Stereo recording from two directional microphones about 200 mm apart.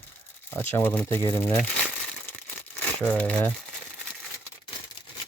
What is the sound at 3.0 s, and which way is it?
Speech, 5° left (ahead or behind).